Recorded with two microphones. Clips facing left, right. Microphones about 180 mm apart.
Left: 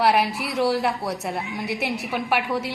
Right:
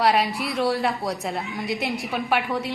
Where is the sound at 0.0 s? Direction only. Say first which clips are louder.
Left 1 dB; 5° left (ahead or behind).